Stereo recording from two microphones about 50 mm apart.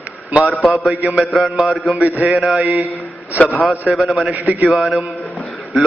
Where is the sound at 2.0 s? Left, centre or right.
Right.